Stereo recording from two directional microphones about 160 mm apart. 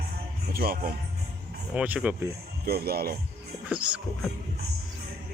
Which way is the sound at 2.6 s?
75° right (ahead or behind).